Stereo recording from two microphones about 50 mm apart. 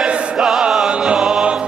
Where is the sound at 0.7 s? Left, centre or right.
Centre.